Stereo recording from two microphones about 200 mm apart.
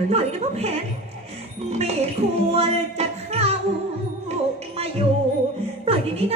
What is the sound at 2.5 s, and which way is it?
Music, 30° right (ahead or behind).